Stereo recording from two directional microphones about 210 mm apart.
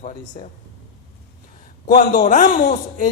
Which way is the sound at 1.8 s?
35° left (ahead or behind).